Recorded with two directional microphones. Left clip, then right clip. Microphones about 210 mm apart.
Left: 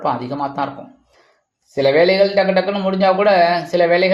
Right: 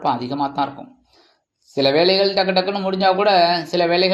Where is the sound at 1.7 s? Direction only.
20° right (ahead or behind).